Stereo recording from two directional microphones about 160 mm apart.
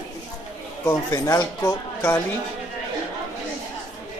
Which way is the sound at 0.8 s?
20° left (ahead or behind).